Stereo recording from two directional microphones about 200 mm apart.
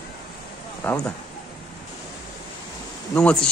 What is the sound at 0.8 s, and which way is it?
Speech, 10° left (ahead or behind).